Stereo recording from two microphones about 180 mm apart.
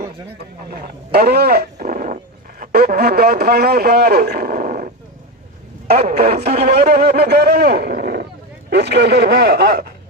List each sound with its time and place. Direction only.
0.7 s speech: 55° right (ahead or behind)
5.9 s speech: 60° right (ahead or behind)